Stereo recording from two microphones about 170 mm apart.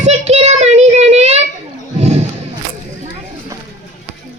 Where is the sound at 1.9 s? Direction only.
40° right (ahead or behind).